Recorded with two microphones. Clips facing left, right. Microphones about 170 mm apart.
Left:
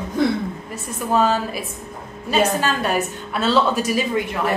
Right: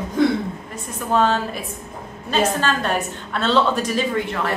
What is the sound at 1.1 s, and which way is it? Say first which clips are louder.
A woman's voice: even; 5° left (ahead or behind).